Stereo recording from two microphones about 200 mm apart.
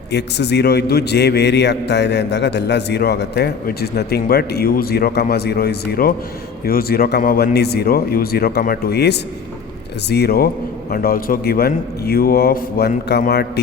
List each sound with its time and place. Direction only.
0.1 s a man's voice: 55° left (ahead or behind)